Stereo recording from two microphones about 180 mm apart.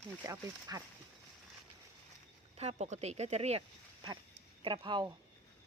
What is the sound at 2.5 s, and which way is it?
Speech, 35° right (ahead or behind).